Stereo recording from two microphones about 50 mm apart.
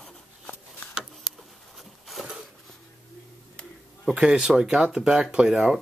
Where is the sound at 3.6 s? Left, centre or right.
Left.